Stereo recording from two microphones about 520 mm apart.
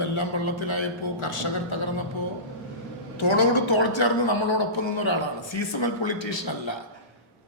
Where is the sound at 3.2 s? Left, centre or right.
Left.